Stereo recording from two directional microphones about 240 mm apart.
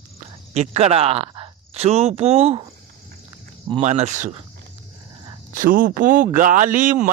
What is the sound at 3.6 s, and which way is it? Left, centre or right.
Speech, right.